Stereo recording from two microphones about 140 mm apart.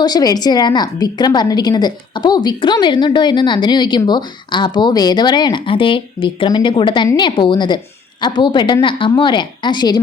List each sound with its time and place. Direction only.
0.0 s a woman's voice: 30° left (ahead or behind)